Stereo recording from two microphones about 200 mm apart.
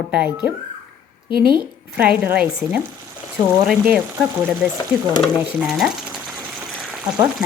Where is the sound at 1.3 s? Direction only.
50° right (ahead or behind).